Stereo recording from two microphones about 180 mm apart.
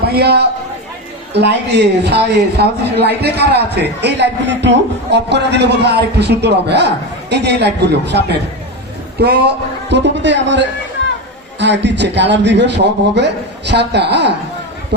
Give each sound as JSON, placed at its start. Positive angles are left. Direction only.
{"t": 0.0, "sound": "a man's voice", "side_deg": -65}
{"t": 11.6, "sound": "a man's voice", "side_deg": -75}